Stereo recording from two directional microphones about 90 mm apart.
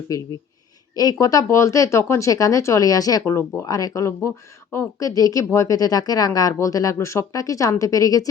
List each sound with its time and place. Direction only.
0.1 s speech: 40° left (ahead or behind)